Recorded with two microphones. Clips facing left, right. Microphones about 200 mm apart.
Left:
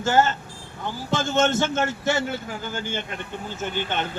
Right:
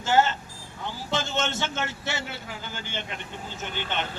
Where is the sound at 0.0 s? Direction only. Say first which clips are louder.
Left 2 dB; 50° left (ahead or behind).